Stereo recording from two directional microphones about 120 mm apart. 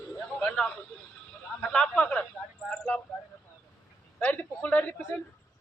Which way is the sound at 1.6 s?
10° left (ahead or behind).